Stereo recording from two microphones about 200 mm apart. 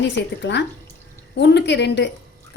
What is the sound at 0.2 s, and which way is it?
Speech, 60° left (ahead or behind).